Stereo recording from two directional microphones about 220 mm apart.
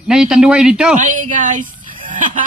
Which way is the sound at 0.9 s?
35° right (ahead or behind).